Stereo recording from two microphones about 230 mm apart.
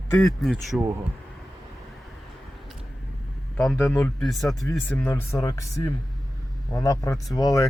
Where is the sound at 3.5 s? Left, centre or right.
Centre.